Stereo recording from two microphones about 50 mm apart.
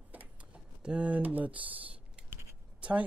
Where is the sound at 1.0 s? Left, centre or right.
Right.